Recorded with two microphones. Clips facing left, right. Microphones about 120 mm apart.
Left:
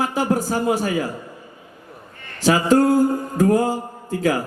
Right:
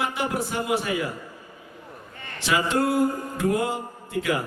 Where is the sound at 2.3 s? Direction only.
40° left (ahead or behind).